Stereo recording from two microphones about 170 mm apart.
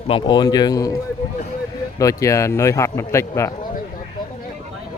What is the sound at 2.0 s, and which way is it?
A man's voice, 20° left (ahead or behind).